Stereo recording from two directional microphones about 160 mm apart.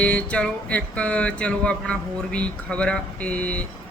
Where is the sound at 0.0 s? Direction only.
5° left (ahead or behind).